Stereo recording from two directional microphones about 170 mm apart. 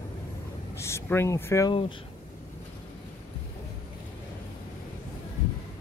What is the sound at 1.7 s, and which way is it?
Speech, 30° left (ahead or behind).